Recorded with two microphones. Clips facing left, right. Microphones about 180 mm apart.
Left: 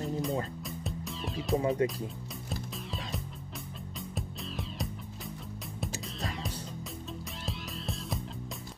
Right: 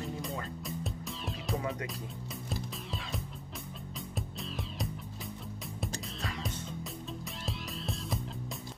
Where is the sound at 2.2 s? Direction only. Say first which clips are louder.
Even; centre (ahead or behind).